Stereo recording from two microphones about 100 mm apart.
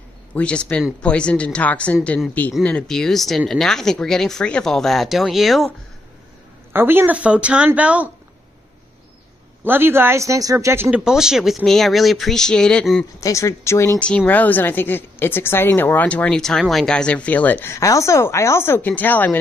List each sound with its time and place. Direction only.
0.3 s speech: 10° left (ahead or behind)
6.7 s speech: 20° right (ahead or behind)
9.7 s speech: 20° right (ahead or behind)
10.9 s speech: 5° right (ahead or behind)
13.2 s speech: 30° left (ahead or behind)
13.9 s speech: 10° left (ahead or behind)
17.7 s speech: 30° left (ahead or behind)